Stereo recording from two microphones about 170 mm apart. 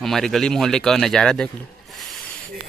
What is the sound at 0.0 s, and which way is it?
A man's voice, centre (ahead or behind).